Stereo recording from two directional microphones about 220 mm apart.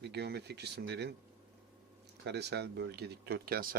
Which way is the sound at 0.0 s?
50° right (ahead or behind).